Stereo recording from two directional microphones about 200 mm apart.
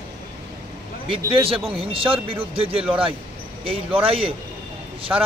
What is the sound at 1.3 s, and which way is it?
Speech, 25° right (ahead or behind).